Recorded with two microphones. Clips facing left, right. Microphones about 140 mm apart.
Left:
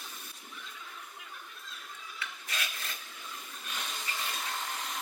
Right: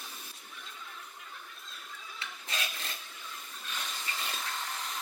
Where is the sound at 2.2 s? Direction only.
30° right (ahead or behind).